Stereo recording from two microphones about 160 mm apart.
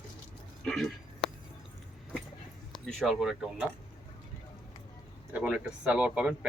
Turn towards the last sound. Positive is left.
turn(degrees=-5)  # may be behind; listen again after turning